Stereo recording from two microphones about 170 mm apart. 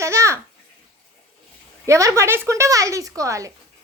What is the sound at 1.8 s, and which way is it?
Speech, 20° right (ahead or behind).